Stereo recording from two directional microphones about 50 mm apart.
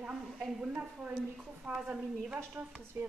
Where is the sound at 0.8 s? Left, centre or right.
Right.